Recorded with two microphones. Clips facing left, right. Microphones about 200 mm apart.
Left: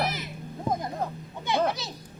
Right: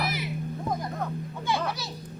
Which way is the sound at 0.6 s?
25° left (ahead or behind).